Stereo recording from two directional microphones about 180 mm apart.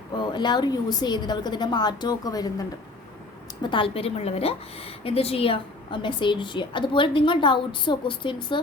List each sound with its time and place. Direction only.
0.2 s a woman's voice: 25° left (ahead or behind)